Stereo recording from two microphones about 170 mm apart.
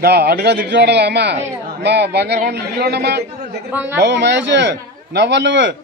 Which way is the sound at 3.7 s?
10° right (ahead or behind).